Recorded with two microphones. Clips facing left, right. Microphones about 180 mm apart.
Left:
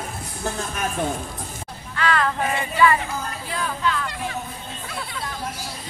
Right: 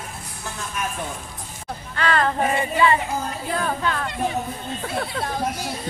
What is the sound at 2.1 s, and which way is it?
Female singing, 30° right (ahead or behind).